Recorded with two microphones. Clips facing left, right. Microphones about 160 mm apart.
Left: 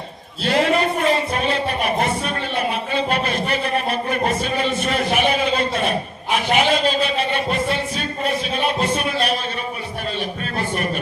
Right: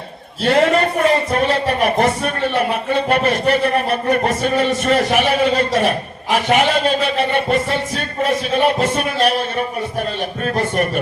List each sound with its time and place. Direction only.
0.4 s speech: 55° right (ahead or behind)
10.6 s speech: 50° right (ahead or behind)